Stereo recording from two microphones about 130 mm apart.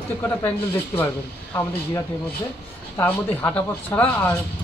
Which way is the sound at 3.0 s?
15° left (ahead or behind).